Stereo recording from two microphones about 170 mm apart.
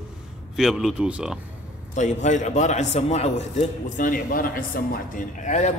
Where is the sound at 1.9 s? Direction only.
45° left (ahead or behind).